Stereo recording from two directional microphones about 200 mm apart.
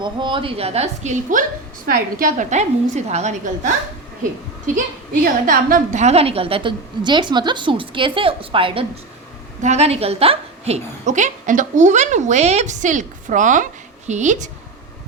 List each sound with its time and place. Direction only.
0.0 s a woman's voice: 25° right (ahead or behind)